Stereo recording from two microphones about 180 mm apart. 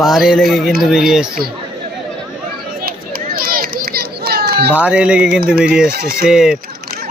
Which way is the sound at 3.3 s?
55° right (ahead or behind).